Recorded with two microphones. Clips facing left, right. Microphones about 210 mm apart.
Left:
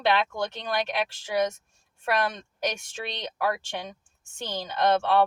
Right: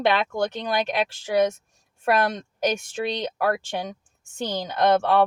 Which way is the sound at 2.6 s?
45° right (ahead or behind).